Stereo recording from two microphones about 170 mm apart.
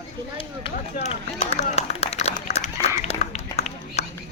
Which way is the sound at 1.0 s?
40° left (ahead or behind).